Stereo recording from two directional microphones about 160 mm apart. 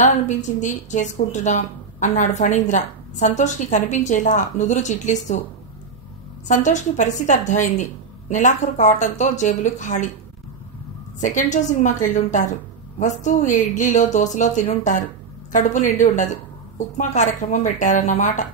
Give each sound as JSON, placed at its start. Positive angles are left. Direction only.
{"t": 0.0, "sound": "a woman's voice", "side_deg": 50}
{"t": 6.4, "sound": "a woman's voice", "side_deg": 50}
{"t": 11.1, "sound": "a woman's voice", "side_deg": 50}